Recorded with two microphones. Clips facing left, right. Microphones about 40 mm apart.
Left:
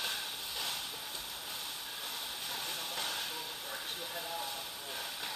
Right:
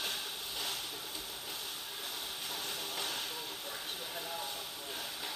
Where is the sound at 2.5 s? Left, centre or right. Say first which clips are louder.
Left 1 dB; left.